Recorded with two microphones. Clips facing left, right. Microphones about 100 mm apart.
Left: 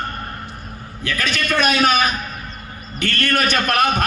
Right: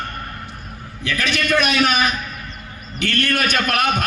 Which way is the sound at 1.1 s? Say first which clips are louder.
Right 2 dB; 40° left (ahead or behind).